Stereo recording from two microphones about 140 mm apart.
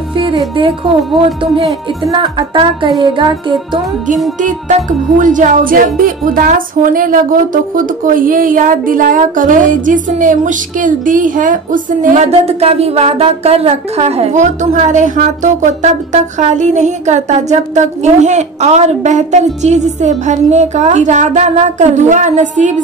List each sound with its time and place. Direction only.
0.1 s speech: 35° right (ahead or behind)
2.1 s music: 35° right (ahead or behind)
4.4 s a woman's voice: 65° right (ahead or behind)
12.3 s speech: 45° right (ahead or behind)